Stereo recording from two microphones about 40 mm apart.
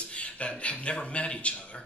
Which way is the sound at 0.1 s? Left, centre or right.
Left.